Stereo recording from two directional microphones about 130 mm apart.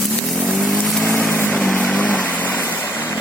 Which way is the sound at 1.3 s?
15° left (ahead or behind).